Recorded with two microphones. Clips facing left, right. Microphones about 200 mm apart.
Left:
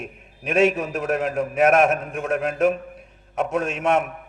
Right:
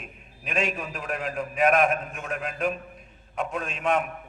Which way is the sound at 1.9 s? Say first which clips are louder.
Left 7 dB; 50° left (ahead or behind).